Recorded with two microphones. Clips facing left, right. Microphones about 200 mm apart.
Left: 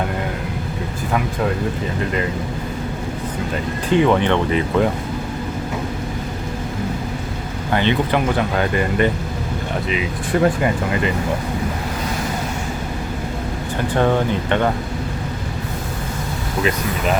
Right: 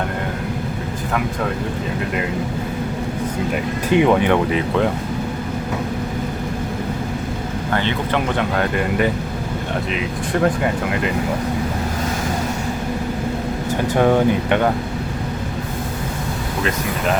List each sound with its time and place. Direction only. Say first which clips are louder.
3.9 s speech: right 1 dB; 15° right (ahead or behind)
7.7 s speech: left 3 dB; 15° left (ahead or behind)
8.4 s speech: left 1 dB; centre (ahead or behind)
10.3 s speech: left 1 dB; 5° left (ahead or behind)
13.9 s speech: right 2 dB; 10° right (ahead or behind)